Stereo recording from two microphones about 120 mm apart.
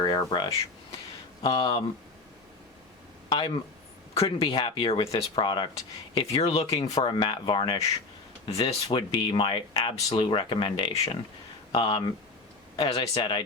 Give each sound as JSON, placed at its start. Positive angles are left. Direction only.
{"t": 0.0, "sound": "speech", "side_deg": 35}
{"t": 1.4, "sound": "speech", "side_deg": 45}
{"t": 3.2, "sound": "speech", "side_deg": 45}
{"t": 4.1, "sound": "speech", "side_deg": 55}
{"t": 6.7, "sound": "speech", "side_deg": 35}
{"t": 8.4, "sound": "speech", "side_deg": 55}